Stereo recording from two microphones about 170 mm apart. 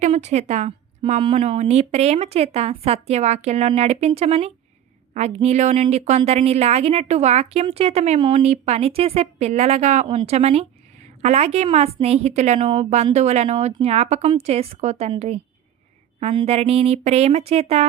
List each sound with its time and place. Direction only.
0.0 s speech: 40° right (ahead or behind)